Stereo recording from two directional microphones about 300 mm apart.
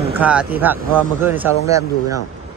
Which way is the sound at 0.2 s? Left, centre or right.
Centre.